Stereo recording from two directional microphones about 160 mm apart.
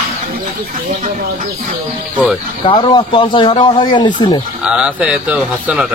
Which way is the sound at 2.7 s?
30° left (ahead or behind).